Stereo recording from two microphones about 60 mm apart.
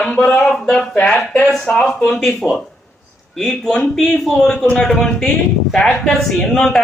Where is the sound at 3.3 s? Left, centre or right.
Centre.